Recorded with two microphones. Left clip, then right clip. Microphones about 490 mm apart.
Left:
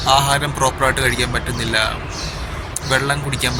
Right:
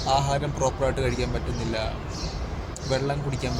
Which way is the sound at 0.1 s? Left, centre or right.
Right.